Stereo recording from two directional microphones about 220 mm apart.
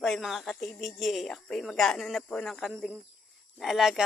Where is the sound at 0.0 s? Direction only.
Centre (ahead or behind).